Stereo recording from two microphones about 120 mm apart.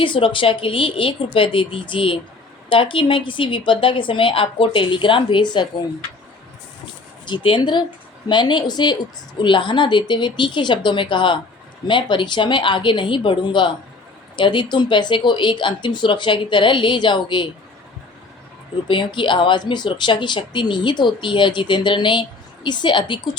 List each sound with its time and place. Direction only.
0.0 s a woman's voice: 45° left (ahead or behind)
7.3 s a woman's voice: 45° left (ahead or behind)
18.9 s speech: 45° left (ahead or behind)